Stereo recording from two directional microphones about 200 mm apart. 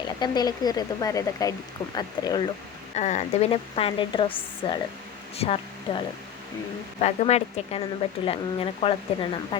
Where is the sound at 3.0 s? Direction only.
35° left (ahead or behind).